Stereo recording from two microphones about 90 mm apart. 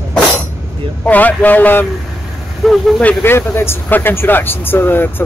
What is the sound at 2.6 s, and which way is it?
Speech, centre (ahead or behind).